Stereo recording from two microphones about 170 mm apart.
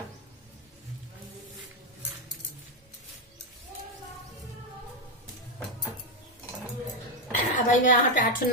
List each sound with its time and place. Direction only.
7.3 s a woman's voice: 50° left (ahead or behind)